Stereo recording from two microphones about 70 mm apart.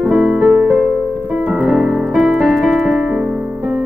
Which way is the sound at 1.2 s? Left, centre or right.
Centre.